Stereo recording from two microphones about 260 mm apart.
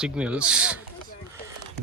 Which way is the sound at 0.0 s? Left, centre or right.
Centre.